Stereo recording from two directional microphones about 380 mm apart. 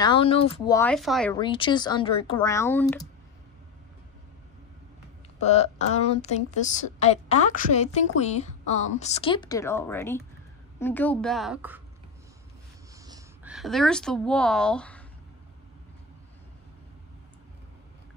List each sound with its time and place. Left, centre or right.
0.0 s speech: centre
5.4 s a woman's voice: centre
13.0 s speech: centre